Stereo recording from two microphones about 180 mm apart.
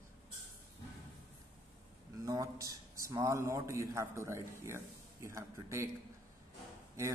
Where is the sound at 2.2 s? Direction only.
20° right (ahead or behind).